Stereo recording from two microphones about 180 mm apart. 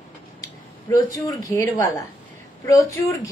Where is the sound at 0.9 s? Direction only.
20° left (ahead or behind).